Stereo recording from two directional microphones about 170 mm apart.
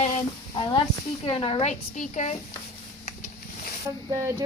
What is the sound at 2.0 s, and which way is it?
Speech, 45° left (ahead or behind).